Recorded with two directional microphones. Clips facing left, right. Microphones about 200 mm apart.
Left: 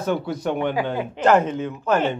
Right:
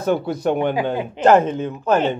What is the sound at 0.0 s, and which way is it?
Speech, 45° right (ahead or behind).